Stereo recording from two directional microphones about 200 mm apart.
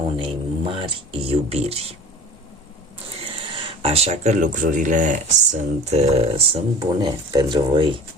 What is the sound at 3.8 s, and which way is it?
Speech, 30° right (ahead or behind).